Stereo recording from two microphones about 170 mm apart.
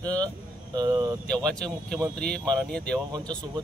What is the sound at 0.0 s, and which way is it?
Speech, 25° right (ahead or behind).